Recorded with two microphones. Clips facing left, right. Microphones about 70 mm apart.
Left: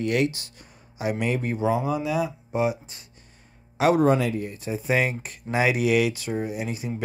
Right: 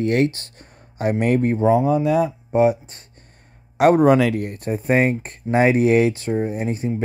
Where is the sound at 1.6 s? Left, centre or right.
Centre.